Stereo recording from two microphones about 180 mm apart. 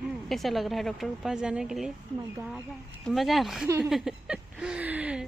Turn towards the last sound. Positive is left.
turn(degrees=-5)  # may be behind; listen again after turning